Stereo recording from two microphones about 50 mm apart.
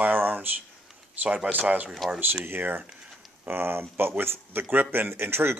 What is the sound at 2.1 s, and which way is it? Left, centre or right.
Speech, right.